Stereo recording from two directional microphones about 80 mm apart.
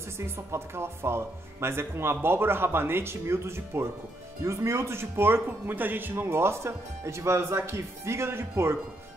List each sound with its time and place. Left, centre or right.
0.2 s a man's voice: right